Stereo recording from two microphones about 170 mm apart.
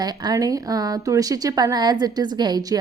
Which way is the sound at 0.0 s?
25° right (ahead or behind).